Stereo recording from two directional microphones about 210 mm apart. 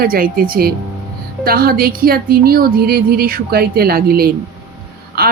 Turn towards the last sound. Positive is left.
turn(degrees=-45)  # may be behind; listen again after turning